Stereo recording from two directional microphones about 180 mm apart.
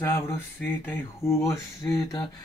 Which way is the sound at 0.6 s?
15° left (ahead or behind).